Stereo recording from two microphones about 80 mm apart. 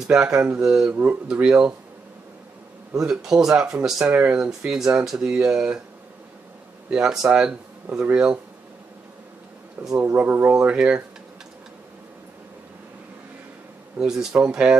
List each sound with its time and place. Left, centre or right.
0.1 s speech: centre
3.0 s speech: centre; by 4.5 s right
4.5 s speech: centre
6.9 s speech: centre
9.9 s speech: right
13.9 s speech: centre